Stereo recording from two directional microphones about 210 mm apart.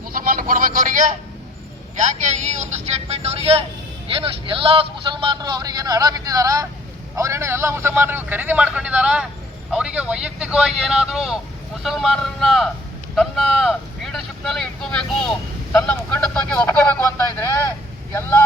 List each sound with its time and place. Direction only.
0.0 s a man's voice: 45° right (ahead or behind); by 18.4 s 10° left (ahead or behind)